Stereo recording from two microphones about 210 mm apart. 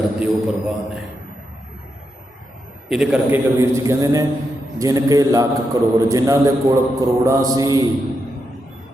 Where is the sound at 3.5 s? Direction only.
15° right (ahead or behind).